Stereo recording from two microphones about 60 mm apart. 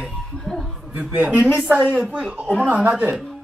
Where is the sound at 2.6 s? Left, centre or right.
Right.